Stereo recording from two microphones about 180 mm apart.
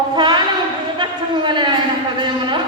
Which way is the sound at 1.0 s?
25° right (ahead or behind).